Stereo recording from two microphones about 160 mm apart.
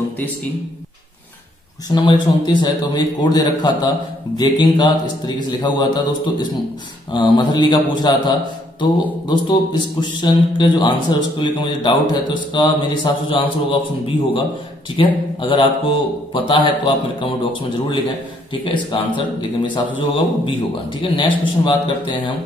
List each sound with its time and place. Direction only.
1.9 s a man's voice: 30° left (ahead or behind)